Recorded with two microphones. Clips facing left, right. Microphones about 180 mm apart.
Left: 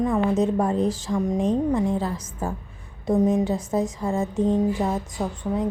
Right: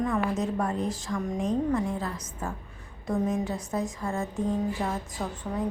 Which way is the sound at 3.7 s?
25° left (ahead or behind).